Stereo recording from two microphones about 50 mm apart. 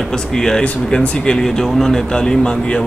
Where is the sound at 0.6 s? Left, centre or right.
Left.